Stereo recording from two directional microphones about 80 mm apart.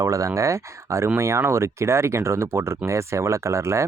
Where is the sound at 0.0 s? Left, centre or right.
Right.